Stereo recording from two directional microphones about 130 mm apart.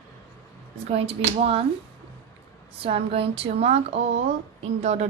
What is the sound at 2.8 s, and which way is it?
A woman's voice, 50° right (ahead or behind).